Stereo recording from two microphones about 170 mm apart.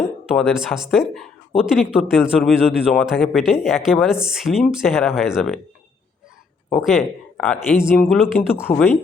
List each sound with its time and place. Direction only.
0.3 s speech: 5° right (ahead or behind)
6.7 s speech: centre (ahead or behind)
8.7 s speech: 30° left (ahead or behind)